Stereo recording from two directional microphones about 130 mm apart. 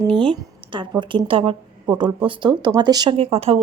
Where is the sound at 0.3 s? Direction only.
40° right (ahead or behind).